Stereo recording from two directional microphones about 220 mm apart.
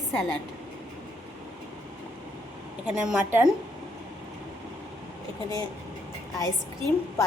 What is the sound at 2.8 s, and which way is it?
Speech, 5° right (ahead or behind).